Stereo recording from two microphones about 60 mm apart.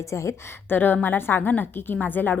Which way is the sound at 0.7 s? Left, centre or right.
Left.